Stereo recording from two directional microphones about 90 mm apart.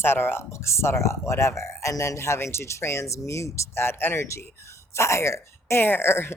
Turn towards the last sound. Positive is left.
turn(degrees=25)  # may be behind; listen again after turning